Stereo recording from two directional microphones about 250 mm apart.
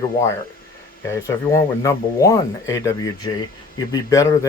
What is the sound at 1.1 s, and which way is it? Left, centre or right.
Speech, centre.